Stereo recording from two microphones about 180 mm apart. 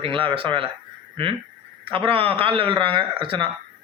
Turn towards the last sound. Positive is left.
turn(degrees=-30)  # may be behind; listen again after turning